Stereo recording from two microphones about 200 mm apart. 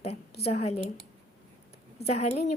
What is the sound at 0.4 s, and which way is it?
Speech, 30° left (ahead or behind).